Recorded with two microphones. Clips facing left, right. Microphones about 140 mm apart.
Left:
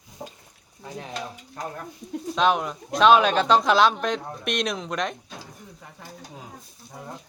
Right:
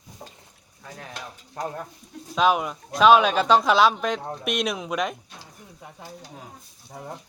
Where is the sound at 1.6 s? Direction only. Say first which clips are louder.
Right 3 dB; 20° right (ahead or behind).